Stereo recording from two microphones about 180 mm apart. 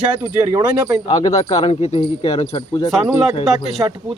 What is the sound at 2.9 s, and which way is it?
Speech, centre (ahead or behind).